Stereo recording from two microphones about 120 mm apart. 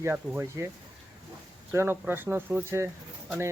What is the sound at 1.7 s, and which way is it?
Speech, 20° right (ahead or behind).